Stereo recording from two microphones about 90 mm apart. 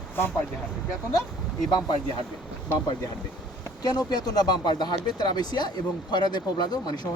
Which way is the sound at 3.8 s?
50° left (ahead or behind).